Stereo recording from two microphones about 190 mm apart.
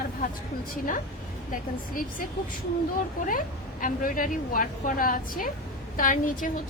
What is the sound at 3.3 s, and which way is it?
A woman's voice, 45° left (ahead or behind).